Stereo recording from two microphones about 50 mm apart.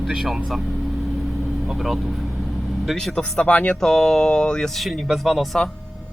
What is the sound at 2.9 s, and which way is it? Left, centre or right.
Speech, centre.